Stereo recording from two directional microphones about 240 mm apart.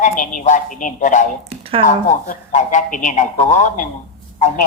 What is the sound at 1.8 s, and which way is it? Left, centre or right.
A man's voice, left.